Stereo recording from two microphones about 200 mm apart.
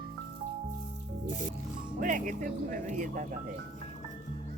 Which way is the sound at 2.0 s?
40° right (ahead or behind).